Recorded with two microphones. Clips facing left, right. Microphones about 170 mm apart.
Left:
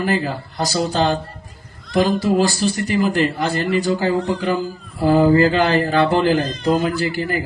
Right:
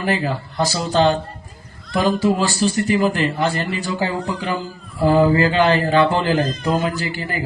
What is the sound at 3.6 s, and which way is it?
Speech, 50° left (ahead or behind).